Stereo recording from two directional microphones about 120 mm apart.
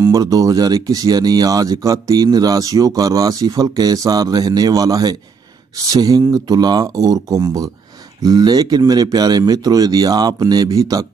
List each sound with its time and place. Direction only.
0.0 s speech: 30° right (ahead or behind)